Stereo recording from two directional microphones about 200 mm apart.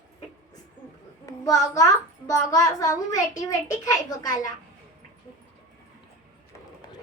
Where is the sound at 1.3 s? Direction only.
15° left (ahead or behind).